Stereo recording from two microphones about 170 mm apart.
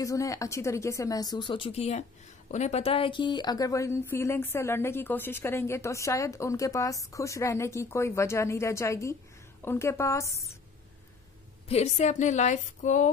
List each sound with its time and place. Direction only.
0.0 s speech: 20° left (ahead or behind)
11.7 s a woman's voice: 40° left (ahead or behind)